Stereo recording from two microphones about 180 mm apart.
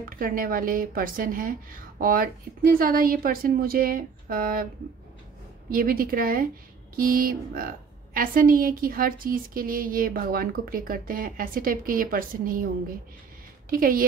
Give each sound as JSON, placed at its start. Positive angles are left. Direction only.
{"t": 0.2, "sound": "a woman's voice", "side_deg": -50}
{"t": 5.7, "sound": "a woman's voice", "side_deg": -55}
{"t": 13.7, "sound": "a woman's voice", "side_deg": -50}